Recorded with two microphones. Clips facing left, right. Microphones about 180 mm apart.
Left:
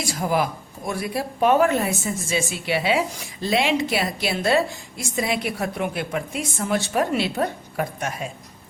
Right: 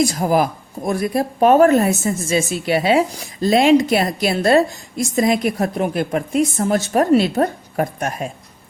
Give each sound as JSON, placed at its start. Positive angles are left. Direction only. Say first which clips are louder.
{"t": 0.0, "sound": "a woman's voice", "louder": "right 7 dB", "side_deg": -40}